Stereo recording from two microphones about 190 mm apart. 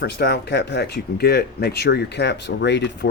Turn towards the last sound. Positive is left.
turn(degrees=65)  # may be behind; listen again after turning